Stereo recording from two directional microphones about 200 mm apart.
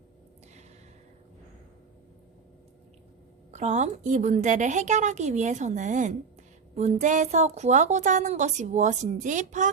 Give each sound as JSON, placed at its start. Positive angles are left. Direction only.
{"t": 3.5, "sound": "a woman's voice", "side_deg": -35}